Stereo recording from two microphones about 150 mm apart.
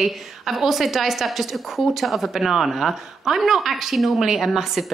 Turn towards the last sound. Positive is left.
turn(degrees=0)  # may be behind; listen again after turning